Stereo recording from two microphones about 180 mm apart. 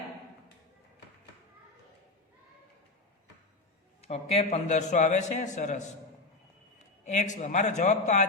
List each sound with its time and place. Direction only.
4.0 s a man's voice: 35° left (ahead or behind)
7.0 s a man's voice: 40° left (ahead or behind)